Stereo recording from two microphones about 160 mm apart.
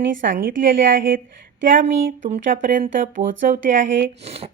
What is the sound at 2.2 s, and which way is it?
A woman's voice, 45° right (ahead or behind).